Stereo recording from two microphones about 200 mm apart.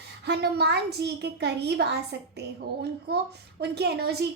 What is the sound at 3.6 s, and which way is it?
Speech, 55° right (ahead or behind).